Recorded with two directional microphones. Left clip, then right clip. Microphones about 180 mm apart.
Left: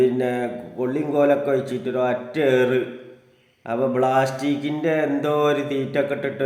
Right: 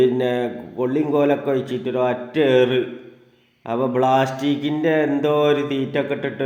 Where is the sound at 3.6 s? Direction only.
20° right (ahead or behind).